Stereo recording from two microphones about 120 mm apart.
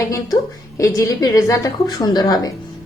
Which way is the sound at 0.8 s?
30° left (ahead or behind).